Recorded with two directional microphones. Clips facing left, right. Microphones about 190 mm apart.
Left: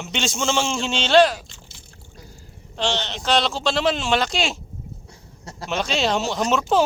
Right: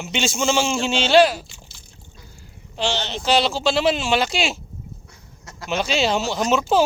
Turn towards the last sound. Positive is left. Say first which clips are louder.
# right 1 dB
turn(degrees=-5)  # may be behind; listen again after turning